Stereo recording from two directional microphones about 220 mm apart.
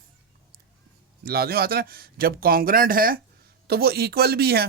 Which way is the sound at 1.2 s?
45° right (ahead or behind).